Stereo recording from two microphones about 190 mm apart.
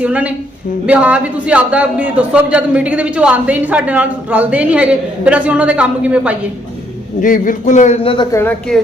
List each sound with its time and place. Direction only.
0.0 s a man's voice: 5° right (ahead or behind)
7.2 s a man's voice: 45° left (ahead or behind); by 8.4 s 25° left (ahead or behind)
8.4 s a woman's voice: 5° left (ahead or behind)